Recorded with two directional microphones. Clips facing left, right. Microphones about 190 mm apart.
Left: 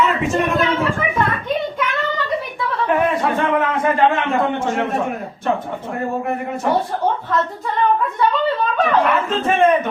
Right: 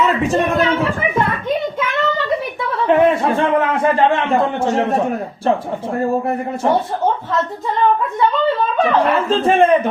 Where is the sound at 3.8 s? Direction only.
30° right (ahead or behind).